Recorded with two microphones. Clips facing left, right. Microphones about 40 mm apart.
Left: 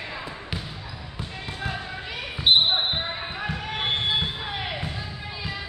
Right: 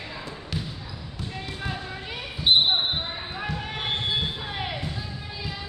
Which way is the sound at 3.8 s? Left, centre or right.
Left.